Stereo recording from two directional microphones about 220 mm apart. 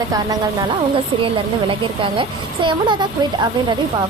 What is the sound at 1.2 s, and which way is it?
A child's voice, 25° right (ahead or behind).